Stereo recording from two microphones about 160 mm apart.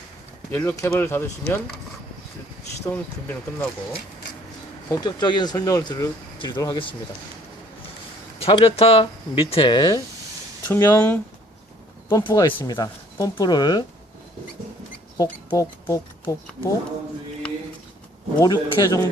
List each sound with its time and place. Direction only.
0.5 s speech: 15° left (ahead or behind)
2.8 s speech: 15° left (ahead or behind)
4.9 s speech: 25° left (ahead or behind)
8.4 s speech: 40° left (ahead or behind); by 11.2 s 15° left (ahead or behind)
12.0 s speech: 25° left (ahead or behind)
15.4 s speech: 15° left (ahead or behind)
18.4 s speech: 25° left (ahead or behind)